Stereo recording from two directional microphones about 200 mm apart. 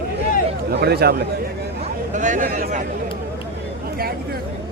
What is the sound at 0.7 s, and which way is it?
Speech, 55° right (ahead or behind).